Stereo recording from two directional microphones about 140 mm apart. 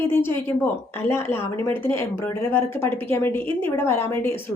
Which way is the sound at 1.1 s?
15° left (ahead or behind).